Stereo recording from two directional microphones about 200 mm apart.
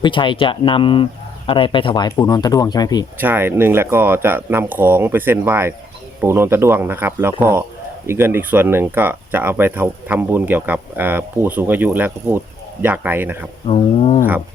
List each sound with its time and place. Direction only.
0.0 s speech: 25° left (ahead or behind)
3.2 s speech: 10° right (ahead or behind)
13.7 s speech: 30° left (ahead or behind)